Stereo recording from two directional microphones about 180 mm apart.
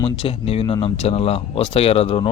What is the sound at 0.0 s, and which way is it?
Speech, 30° left (ahead or behind).